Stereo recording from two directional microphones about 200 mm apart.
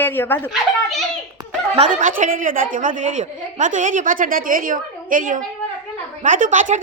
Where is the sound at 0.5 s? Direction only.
Centre (ahead or behind).